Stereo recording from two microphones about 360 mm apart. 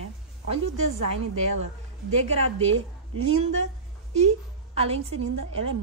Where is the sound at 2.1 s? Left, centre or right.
Centre.